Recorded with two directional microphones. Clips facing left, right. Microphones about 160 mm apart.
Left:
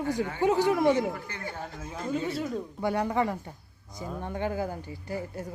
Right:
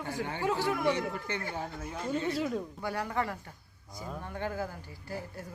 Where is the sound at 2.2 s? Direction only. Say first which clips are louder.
Right 1 dB; centre (ahead or behind).